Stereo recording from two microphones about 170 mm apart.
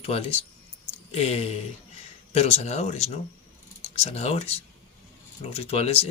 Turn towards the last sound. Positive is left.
turn(degrees=35)  # may be behind; listen again after turning